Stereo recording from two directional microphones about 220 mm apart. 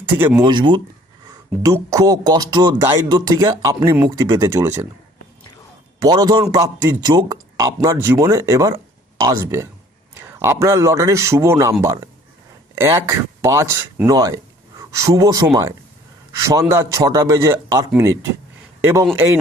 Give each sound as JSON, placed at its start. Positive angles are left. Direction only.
{"t": 0.2, "sound": "speech", "side_deg": -10}
{"t": 0.4, "sound": "speech", "side_deg": -20}
{"t": 6.0, "sound": "a man's voice", "side_deg": -15}